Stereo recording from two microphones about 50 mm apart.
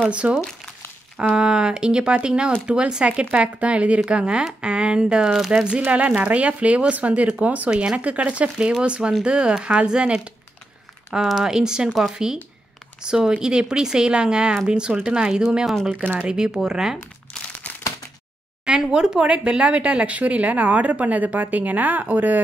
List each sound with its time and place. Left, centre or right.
0.1 s speech: right
3.3 s speech: right
5.9 s speech: right
11.1 s speech: centre
18.7 s speech: centre; by 22.4 s right